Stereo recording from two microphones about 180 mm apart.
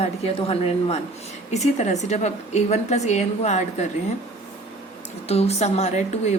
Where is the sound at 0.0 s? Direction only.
35° left (ahead or behind).